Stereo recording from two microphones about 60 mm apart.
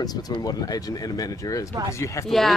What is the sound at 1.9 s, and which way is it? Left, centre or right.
Speech, left.